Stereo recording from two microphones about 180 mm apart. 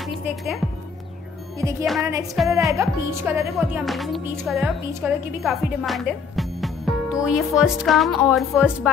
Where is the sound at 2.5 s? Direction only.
15° right (ahead or behind).